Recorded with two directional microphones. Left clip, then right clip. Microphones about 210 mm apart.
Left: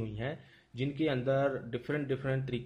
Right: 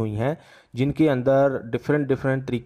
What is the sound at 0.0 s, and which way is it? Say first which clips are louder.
Speech: right 13 dB; 45° right (ahead or behind).